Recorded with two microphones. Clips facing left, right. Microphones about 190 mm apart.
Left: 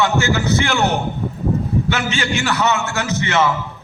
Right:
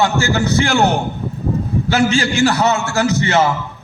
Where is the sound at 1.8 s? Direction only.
35° right (ahead or behind).